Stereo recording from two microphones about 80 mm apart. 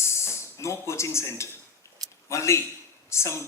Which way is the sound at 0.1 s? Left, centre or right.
Left.